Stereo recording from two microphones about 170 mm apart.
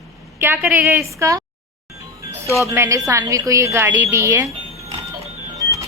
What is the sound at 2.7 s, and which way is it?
A woman's voice, 20° right (ahead or behind).